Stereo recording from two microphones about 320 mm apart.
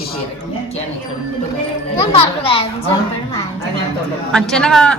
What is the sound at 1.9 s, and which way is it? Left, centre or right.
Speech, centre.